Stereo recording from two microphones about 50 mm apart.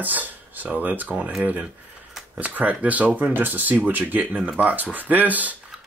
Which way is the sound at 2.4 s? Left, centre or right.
Right.